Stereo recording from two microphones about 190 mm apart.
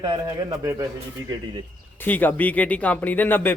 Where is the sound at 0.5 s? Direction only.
15° right (ahead or behind).